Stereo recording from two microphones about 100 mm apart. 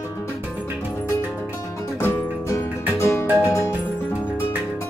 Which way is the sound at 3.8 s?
20° left (ahead or behind).